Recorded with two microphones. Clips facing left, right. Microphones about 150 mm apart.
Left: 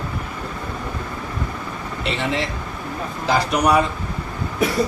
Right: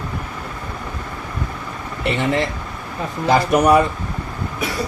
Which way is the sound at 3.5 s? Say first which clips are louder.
Right 4 dB; 55° right (ahead or behind).